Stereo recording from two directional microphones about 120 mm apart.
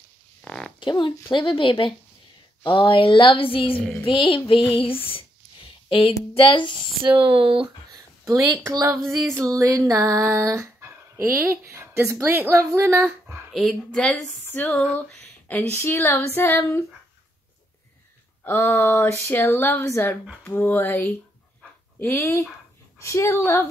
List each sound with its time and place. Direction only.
0.4 s livestock: 5° left (ahead or behind)
0.7 s a woman's voice: 40° left (ahead or behind)
7.1 s speech: 50° right (ahead or behind)
7.6 s speech: 30° right (ahead or behind)
9.3 s female singing: 25° right (ahead or behind)
13.5 s speech: centre (ahead or behind)
14.7 s a sound: 5° left (ahead or behind)
15.7 s speech: 20° left (ahead or behind)
18.4 s speech: 20° left (ahead or behind)
20.4 s a sound: 15° left (ahead or behind)
22.0 s speech: 20° left (ahead or behind)